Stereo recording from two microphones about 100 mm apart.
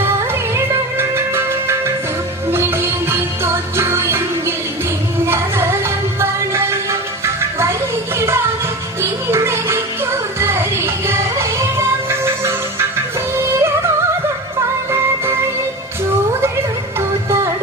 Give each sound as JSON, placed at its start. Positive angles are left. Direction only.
{"t": 0.5, "sound": "music", "side_deg": -25}
{"t": 8.2, "sound": "music", "side_deg": -25}
{"t": 17.0, "sound": "music", "side_deg": -30}